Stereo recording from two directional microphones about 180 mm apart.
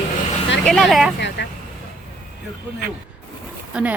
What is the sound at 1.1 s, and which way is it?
Speech, 70° left (ahead or behind).